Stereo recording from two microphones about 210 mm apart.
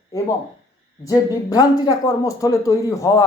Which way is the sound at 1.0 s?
15° left (ahead or behind).